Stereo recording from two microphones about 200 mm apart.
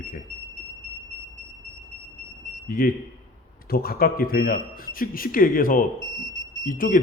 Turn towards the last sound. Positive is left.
turn(degrees=40)  # may be behind; listen again after turning